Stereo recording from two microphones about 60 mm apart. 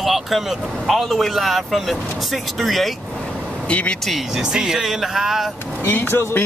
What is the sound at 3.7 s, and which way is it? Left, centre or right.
Speech, left.